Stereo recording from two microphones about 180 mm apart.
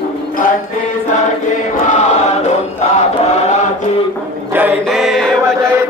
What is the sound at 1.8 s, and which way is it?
Chant, 40° left (ahead or behind).